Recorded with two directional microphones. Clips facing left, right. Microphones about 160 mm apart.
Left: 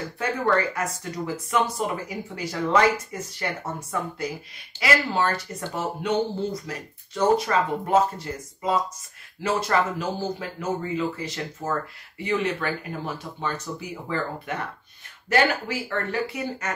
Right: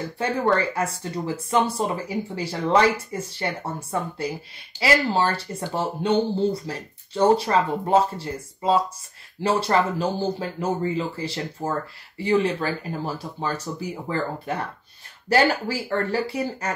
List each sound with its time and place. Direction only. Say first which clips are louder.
0.2 s speech: right 2 dB; 30° right (ahead or behind)